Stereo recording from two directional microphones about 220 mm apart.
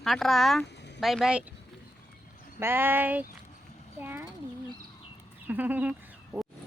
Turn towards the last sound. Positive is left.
turn(degrees=-5)  # may be behind; listen again after turning